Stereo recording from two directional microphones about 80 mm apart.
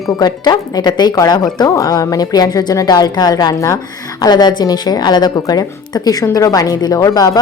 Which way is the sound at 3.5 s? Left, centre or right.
Left.